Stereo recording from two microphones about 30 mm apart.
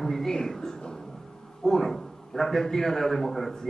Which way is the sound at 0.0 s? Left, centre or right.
Centre.